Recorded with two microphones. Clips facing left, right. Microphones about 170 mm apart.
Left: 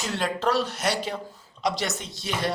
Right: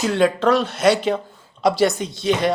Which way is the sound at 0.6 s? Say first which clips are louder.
Right 10 dB; 65° right (ahead or behind).